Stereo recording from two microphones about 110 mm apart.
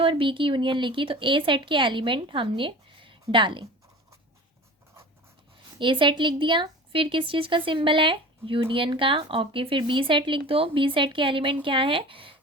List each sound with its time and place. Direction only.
0.0 s a woman's voice: 50° right (ahead or behind)
5.8 s a woman's voice: 50° right (ahead or behind)